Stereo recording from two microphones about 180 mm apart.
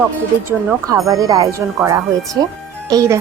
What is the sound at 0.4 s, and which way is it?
Speech, 15° right (ahead or behind).